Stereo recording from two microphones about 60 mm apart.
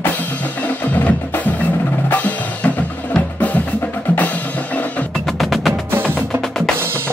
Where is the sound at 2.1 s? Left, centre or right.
Left.